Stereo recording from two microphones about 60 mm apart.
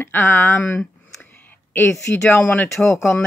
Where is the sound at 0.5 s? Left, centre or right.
Left.